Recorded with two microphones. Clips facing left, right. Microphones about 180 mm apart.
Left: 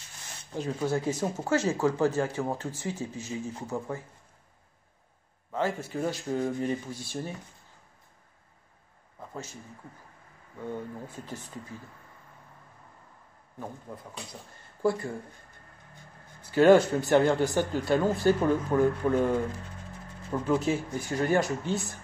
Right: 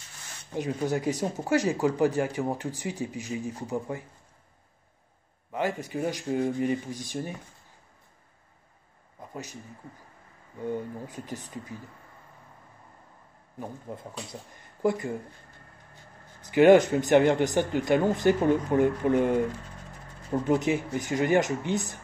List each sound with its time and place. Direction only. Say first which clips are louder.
0.6 s speech: right 1 dB; 15° right (ahead or behind)
5.5 s speech: even; 15° right (ahead or behind)
9.3 s speech: right 1 dB; 15° right (ahead or behind)
10.6 s speech: right 4 dB; 15° right (ahead or behind)
13.6 s a man's voice: right 2 dB; 20° right (ahead or behind)
16.3 s speech: right 2 dB; 15° right (ahead or behind)
20.4 s speech: right 1 dB; 15° right (ahead or behind)